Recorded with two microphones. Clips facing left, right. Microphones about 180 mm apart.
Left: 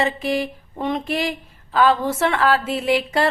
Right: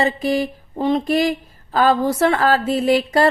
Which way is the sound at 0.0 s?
40° right (ahead or behind).